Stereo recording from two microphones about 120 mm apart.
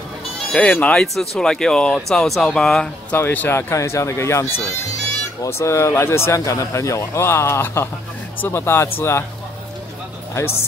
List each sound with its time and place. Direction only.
0.5 s speech: 10° left (ahead or behind)
3.1 s speech: 15° left (ahead or behind)
10.3 s speech: 20° left (ahead or behind)